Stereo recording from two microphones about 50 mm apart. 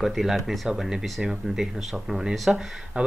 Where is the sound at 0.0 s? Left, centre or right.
Centre.